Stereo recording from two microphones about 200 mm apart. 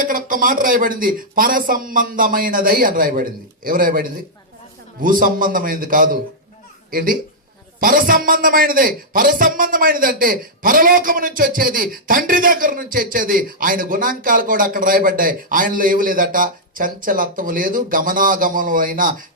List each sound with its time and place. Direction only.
0.0 s a man's voice: 45° right (ahead or behind)